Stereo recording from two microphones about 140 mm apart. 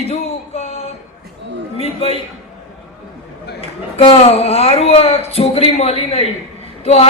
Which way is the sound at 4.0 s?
45° left (ahead or behind).